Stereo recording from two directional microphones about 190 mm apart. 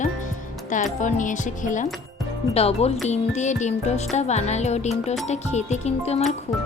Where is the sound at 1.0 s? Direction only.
40° left (ahead or behind).